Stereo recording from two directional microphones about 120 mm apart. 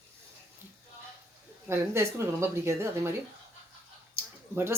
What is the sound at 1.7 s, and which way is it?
Speech, 20° right (ahead or behind).